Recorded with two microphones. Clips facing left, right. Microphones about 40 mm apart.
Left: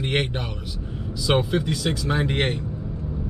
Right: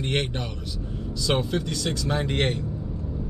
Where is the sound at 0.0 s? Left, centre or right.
Centre.